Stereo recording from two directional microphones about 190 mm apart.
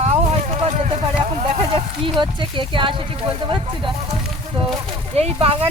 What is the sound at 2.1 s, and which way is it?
Speech, 25° right (ahead or behind).